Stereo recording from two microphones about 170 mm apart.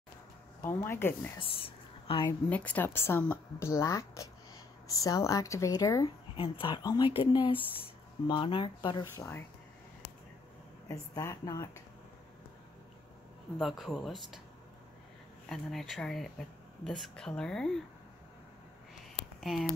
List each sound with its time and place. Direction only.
0.6 s a woman's voice: 15° left (ahead or behind)
1.4 s speech: 30° left (ahead or behind)
2.2 s a woman's voice: 10° left (ahead or behind)
6.3 s speech: 30° left (ahead or behind)
9.0 s a woman's voice: 15° left (ahead or behind)
10.9 s a woman's voice: 15° left (ahead or behind)
13.6 s speech: centre (ahead or behind)
15.4 s speech: centre (ahead or behind)
19.1 s a sound: centre (ahead or behind)